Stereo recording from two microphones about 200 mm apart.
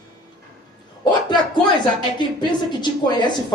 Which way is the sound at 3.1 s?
20° left (ahead or behind).